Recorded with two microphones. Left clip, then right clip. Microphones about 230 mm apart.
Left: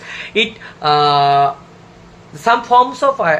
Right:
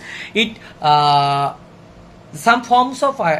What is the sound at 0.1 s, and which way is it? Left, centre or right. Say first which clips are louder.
Speech: left 2 dB; right.